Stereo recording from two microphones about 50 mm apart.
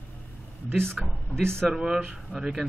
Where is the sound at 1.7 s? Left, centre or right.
Centre.